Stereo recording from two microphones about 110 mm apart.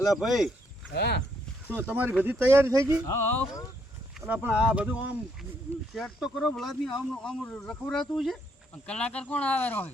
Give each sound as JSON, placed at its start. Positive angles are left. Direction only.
{"t": 0.0, "sound": "speech", "side_deg": 0}
{"t": 1.6, "sound": "speech", "side_deg": -20}
{"t": 3.1, "sound": "speech", "side_deg": 15}
{"t": 4.3, "sound": "speech", "side_deg": -10}
{"t": 5.9, "sound": "speech", "side_deg": 0}